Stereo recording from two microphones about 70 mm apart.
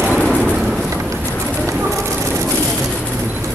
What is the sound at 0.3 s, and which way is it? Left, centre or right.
Vehicle, centre.